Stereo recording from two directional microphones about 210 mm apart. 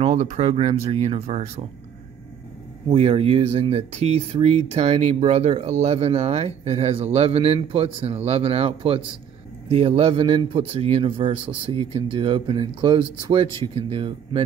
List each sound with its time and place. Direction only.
0.1 s speech: 35° right (ahead or behind)
2.9 s speech: 30° right (ahead or behind)